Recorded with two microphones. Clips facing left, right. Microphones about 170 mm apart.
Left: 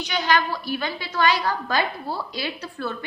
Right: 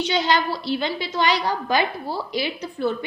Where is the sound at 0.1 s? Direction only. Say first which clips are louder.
Left 2 dB; 30° right (ahead or behind).